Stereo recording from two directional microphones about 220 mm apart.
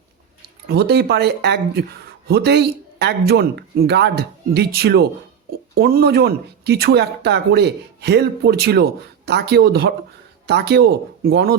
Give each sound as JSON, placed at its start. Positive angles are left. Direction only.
{"t": 0.4, "sound": "speech", "side_deg": -45}